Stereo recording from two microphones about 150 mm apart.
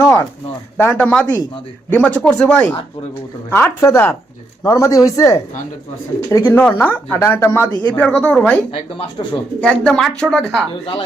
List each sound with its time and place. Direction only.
0.0 s a sound: 15° left (ahead or behind)
0.8 s speech: 10° left (ahead or behind)
3.5 s speech: 15° left (ahead or behind)
8.7 s speech: 35° left (ahead or behind)
9.6 s speech: 5° left (ahead or behind)